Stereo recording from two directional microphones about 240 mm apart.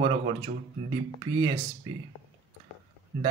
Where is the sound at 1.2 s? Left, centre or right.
Centre.